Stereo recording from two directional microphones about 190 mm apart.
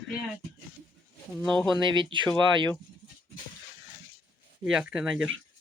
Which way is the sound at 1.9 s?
25° right (ahead or behind).